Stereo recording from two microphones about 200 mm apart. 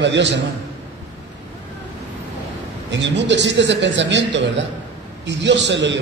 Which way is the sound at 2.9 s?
60° right (ahead or behind).